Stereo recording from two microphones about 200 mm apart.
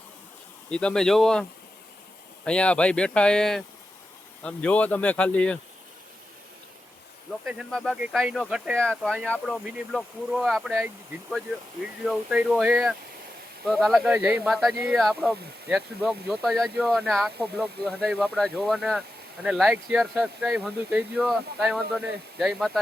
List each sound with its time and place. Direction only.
0.7 s speech: 5° left (ahead or behind)
7.4 s speech: centre (ahead or behind)
12.0 s speech: 5° right (ahead or behind)